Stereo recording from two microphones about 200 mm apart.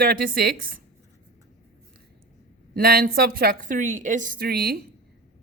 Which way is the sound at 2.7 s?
50° right (ahead or behind).